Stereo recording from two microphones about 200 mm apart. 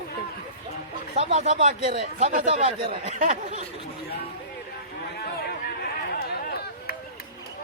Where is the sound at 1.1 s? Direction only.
35° right (ahead or behind).